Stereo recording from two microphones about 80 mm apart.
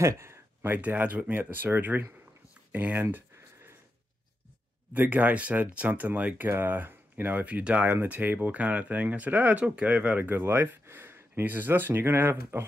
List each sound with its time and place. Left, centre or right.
0.0 s speech: right
2.7 s a sound: right
4.9 s speech: right